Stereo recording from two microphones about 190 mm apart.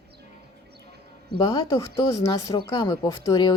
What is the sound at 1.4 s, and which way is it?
A woman's voice, 20° left (ahead or behind).